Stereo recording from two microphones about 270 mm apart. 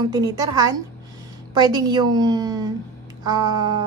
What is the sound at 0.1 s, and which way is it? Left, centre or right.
A woman's voice, centre.